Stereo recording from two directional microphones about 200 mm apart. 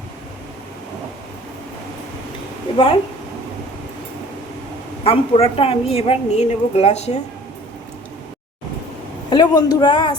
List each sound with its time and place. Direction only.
2.7 s a man's voice: 25° left (ahead or behind)
5.0 s a woman's voice: 30° left (ahead or behind)
9.3 s a man's voice: 20° left (ahead or behind)